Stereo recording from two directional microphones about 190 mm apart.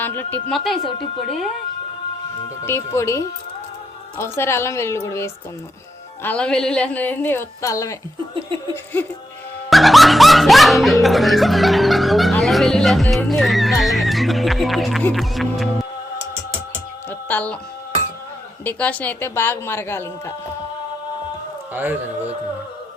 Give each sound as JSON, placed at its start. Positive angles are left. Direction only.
{"t": 0.0, "sound": "a woman's voice", "side_deg": 10}
{"t": 2.6, "sound": "a woman's voice", "side_deg": 15}
{"t": 9.6, "sound": "music", "side_deg": 0}
{"t": 12.4, "sound": "speech", "side_deg": 0}
{"t": 17.1, "sound": "music", "side_deg": 10}
{"t": 18.8, "sound": "a woman's voice", "side_deg": 5}
{"t": 21.7, "sound": "a man's voice", "side_deg": -10}